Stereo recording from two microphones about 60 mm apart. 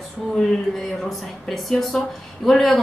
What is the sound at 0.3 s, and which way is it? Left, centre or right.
Speech, centre.